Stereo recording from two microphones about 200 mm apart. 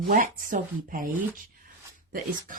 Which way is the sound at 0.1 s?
45° right (ahead or behind).